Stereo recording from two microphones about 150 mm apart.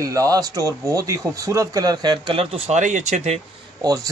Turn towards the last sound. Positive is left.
turn(degrees=-25)  # may be behind; listen again after turning